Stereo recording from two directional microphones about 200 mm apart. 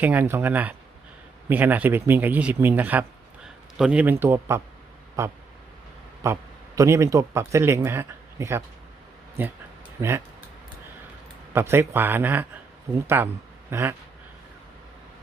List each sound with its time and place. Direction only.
0.0 s speech: 10° right (ahead or behind)
10.0 s speech: 10° right (ahead or behind)
11.5 s speech: 10° right (ahead or behind)